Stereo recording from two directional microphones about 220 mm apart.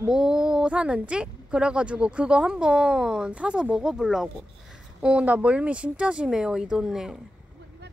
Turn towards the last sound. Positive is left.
turn(degrees=0)  # may be behind; listen again after turning